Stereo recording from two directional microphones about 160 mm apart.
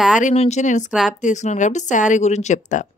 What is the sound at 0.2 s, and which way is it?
A woman's voice, 45° left (ahead or behind).